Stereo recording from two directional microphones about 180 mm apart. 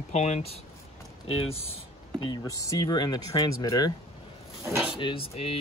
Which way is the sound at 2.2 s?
20° left (ahead or behind).